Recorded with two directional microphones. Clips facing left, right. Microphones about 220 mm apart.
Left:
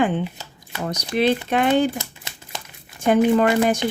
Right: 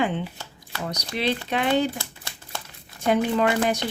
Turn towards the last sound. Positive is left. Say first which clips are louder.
# left 5 dB
turn(degrees=50)  # may be behind; listen again after turning